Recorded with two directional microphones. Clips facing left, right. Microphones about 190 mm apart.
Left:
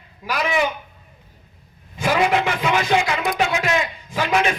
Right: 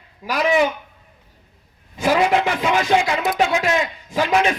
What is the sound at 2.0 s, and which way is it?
A man's voice, 35° right (ahead or behind).